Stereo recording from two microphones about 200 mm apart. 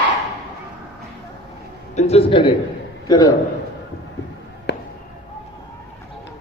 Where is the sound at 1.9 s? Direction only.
30° left (ahead or behind).